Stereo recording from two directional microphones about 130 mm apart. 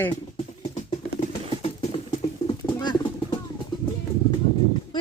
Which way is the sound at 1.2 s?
50° left (ahead or behind).